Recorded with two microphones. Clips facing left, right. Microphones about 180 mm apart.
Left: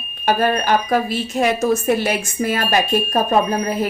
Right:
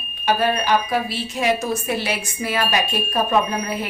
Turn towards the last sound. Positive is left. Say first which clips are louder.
# left 3 dB
turn(degrees=40)  # may be behind; listen again after turning